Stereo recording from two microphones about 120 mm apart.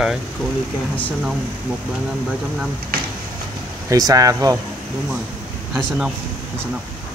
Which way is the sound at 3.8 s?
30° right (ahead or behind).